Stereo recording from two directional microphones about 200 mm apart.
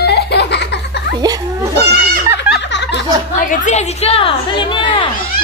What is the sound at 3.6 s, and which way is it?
A woman's voice, 30° left (ahead or behind).